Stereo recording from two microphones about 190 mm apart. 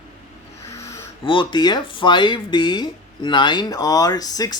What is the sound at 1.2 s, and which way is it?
Speech, 25° left (ahead or behind).